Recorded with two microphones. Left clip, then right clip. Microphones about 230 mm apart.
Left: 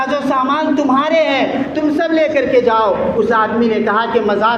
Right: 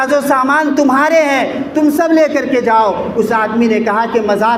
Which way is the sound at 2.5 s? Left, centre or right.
Right.